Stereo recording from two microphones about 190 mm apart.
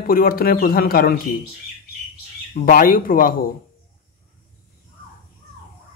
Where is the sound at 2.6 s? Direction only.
45° left (ahead or behind).